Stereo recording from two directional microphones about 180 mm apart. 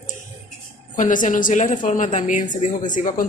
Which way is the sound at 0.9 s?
45° left (ahead or behind).